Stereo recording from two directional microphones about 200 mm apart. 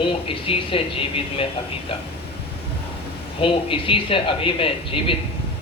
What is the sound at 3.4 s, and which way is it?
Speech, 25° left (ahead or behind).